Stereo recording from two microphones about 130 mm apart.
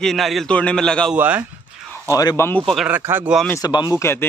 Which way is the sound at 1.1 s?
15° right (ahead or behind).